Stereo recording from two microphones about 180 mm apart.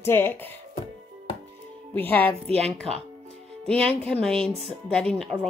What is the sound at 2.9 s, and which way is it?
Speech, 30° right (ahead or behind).